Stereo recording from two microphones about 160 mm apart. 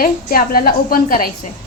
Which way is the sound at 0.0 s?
65° left (ahead or behind).